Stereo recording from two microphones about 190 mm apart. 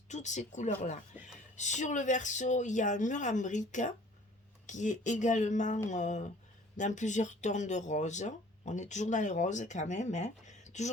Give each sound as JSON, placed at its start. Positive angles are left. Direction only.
{"t": 0.1, "sound": "speech", "side_deg": 40}
{"t": 1.2, "sound": "a sound", "side_deg": -10}
{"t": 1.5, "sound": "speech", "side_deg": 40}